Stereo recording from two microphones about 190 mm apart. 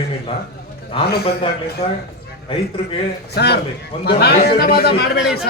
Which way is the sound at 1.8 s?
35° left (ahead or behind).